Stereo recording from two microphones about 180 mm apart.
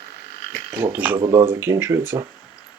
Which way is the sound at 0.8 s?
10° right (ahead or behind).